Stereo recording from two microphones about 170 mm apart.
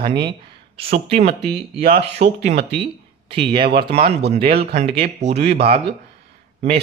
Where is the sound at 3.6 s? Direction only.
70° right (ahead or behind).